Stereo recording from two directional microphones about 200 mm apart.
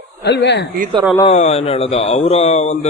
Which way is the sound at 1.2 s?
35° left (ahead or behind).